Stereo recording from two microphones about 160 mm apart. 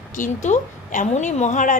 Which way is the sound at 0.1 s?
50° left (ahead or behind).